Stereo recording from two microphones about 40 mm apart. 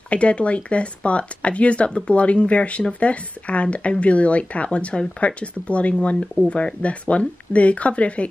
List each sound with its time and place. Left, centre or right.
0.1 s speech: left